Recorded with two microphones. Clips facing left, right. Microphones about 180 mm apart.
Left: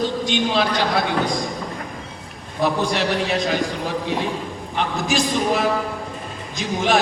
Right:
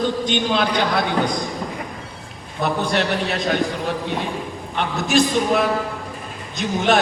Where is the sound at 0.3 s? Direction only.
60° right (ahead or behind).